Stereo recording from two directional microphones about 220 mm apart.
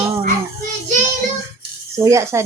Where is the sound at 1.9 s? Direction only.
15° right (ahead or behind).